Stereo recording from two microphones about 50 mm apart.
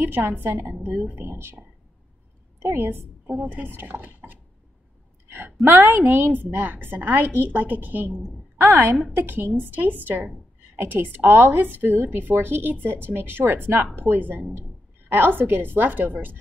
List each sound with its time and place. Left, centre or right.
0.0 s a woman's voice: right
2.6 s a woman's voice: right
3.7 s a woman's voice: right
5.3 s a woman's voice: right
10.8 s a woman's voice: right